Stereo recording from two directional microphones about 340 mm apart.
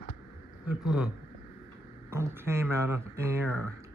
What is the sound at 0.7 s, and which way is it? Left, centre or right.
Speech, centre.